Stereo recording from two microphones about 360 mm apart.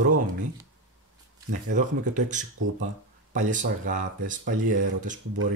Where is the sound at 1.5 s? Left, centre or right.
Right.